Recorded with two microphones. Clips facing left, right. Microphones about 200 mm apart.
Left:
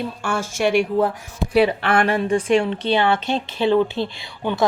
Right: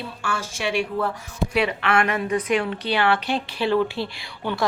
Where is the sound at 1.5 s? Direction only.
35° left (ahead or behind).